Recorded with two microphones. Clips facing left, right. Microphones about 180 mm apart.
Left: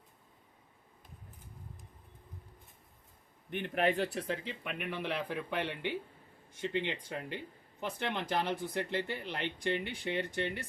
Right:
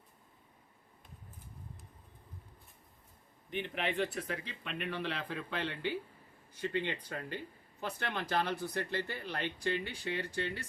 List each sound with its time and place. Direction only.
3.5 s speech: 50° left (ahead or behind); by 4.4 s 35° left (ahead or behind)
4.4 s speech: 10° left (ahead or behind)